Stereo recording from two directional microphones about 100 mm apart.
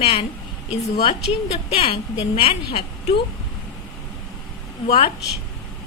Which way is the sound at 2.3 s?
75° left (ahead or behind).